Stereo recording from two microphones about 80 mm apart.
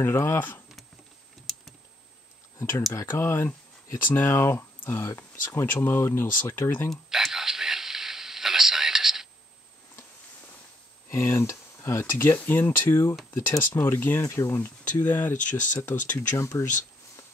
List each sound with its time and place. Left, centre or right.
0.0 s speech: left
2.9 s speech: left
6.9 s a sound: centre
11.1 s speech: left
14.6 s speech: left